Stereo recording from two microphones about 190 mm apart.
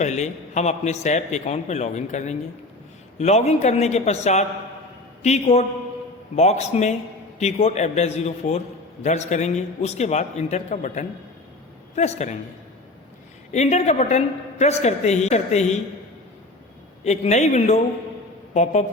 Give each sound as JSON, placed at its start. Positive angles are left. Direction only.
{"t": 0.0, "sound": "a man's voice", "side_deg": 35}
{"t": 13.5, "sound": "a man's voice", "side_deg": 35}
{"t": 17.0, "sound": "a man's voice", "side_deg": 35}